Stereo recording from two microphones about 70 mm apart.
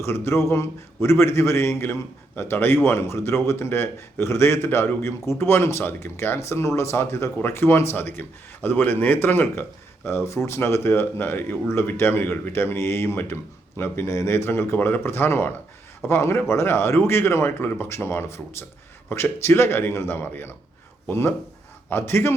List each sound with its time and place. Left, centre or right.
0.0 s a man's voice: left